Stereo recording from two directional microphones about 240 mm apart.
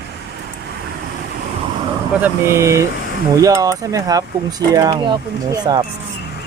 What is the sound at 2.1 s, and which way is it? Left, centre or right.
Speech, centre.